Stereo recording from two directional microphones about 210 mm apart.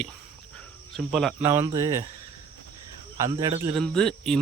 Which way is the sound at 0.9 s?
Centre (ahead or behind).